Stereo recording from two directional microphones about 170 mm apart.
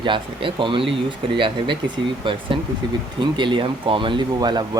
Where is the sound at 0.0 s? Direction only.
30° right (ahead or behind).